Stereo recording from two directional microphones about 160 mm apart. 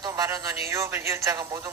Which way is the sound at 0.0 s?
20° right (ahead or behind).